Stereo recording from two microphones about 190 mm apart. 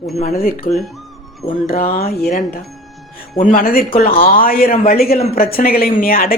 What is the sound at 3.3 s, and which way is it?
Speech, 45° left (ahead or behind).